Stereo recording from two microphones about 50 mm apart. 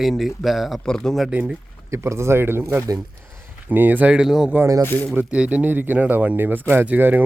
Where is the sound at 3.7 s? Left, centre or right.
Right.